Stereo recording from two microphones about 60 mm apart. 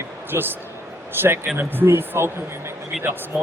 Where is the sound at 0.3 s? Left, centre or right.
Right.